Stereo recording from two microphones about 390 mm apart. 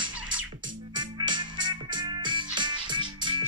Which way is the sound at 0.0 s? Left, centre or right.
Centre.